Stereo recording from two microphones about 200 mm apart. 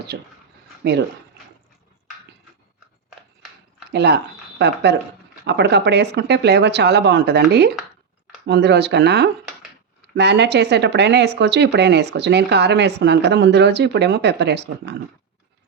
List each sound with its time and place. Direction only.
0.1 s speech: 60° right (ahead or behind)
3.9 s speech: 55° right (ahead or behind)